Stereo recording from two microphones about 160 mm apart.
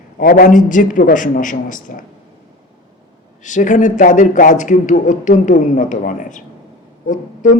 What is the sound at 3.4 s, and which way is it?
A man's voice, 50° left (ahead or behind).